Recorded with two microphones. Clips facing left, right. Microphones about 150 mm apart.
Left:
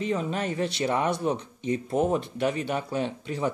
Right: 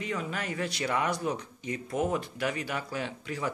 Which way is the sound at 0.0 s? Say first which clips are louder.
Left 6 dB; 25° left (ahead or behind).